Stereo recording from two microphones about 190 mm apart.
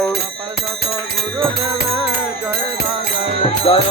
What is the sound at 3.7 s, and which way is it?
Speech, 30° left (ahead or behind).